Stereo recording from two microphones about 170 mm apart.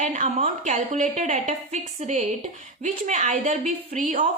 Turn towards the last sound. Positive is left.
turn(degrees=-45)  # may be behind; listen again after turning